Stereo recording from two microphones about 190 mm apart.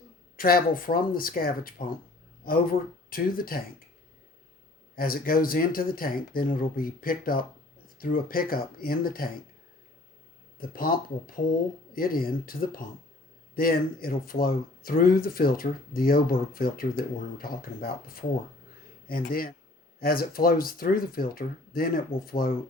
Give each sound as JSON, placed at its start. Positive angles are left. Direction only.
{"t": 0.3, "sound": "speech", "side_deg": 50}
{"t": 4.9, "sound": "speech", "side_deg": 50}
{"t": 10.6, "sound": "speech", "side_deg": 50}
{"t": 11.9, "sound": "speech", "side_deg": 50}